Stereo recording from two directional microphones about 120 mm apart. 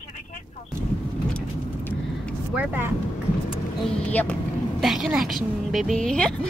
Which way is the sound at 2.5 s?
15° right (ahead or behind).